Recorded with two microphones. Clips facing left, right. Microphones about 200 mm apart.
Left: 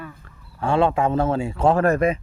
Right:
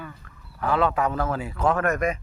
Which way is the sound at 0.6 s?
30° left (ahead or behind).